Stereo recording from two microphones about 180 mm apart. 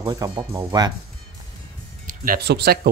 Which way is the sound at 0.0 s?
20° right (ahead or behind).